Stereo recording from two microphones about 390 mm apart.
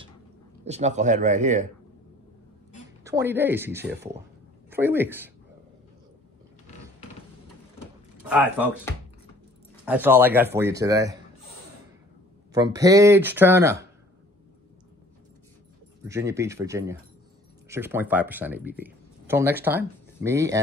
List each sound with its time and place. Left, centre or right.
0.7 s speech: centre
3.0 s speech: centre
3.9 s speech: right
4.6 s speech: centre
8.2 s speech: centre
12.5 s speech: centre
16.0 s speech: centre